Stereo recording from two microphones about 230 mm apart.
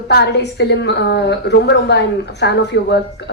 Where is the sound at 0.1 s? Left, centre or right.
Left.